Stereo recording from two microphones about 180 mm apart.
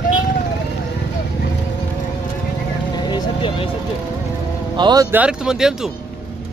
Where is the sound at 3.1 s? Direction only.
30° left (ahead or behind).